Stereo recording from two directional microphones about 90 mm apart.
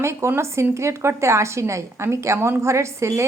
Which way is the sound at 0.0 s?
30° right (ahead or behind).